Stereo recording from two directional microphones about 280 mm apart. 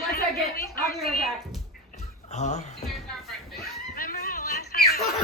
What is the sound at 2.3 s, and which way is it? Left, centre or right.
Speech, left.